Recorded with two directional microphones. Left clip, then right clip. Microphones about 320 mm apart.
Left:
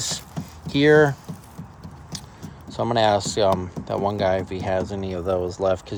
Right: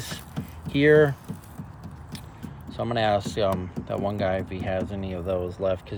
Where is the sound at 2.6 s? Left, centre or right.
Centre.